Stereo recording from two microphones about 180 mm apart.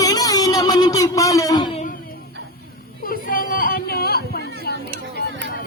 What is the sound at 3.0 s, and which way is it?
Chatter, 50° left (ahead or behind).